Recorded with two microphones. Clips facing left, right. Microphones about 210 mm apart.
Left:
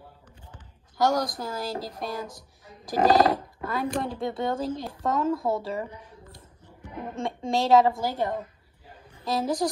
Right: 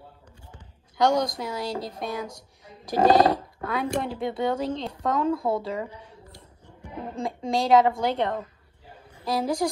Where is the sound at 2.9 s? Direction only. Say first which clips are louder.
Right 2 dB; 25° right (ahead or behind).